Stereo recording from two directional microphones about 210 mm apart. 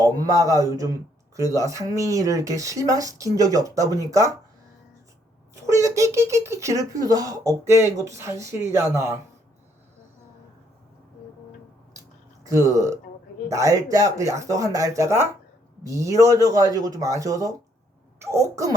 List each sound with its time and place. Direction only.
0.0 s speech: 15° right (ahead or behind)
5.5 s speech: 15° right (ahead or behind)
12.5 s speech: 15° right (ahead or behind)